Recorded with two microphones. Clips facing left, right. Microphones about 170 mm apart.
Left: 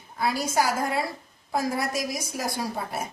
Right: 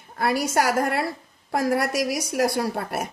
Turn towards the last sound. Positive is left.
turn(degrees=-70)  # may be behind; listen again after turning